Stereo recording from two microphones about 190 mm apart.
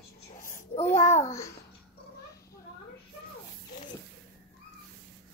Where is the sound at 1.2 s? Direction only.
15° left (ahead or behind).